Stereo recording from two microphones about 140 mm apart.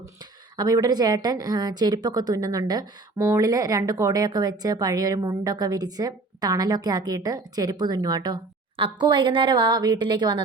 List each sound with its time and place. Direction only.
0.5 s a woman's voice: 25° right (ahead or behind)